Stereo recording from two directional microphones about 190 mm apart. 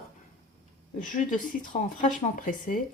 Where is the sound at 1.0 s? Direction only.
45° left (ahead or behind).